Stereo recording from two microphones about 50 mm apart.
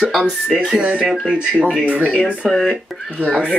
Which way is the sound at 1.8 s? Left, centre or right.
Right.